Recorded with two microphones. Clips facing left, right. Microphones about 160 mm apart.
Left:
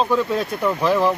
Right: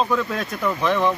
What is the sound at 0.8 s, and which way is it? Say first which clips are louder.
Speech: left 2 dB; 5° left (ahead or behind).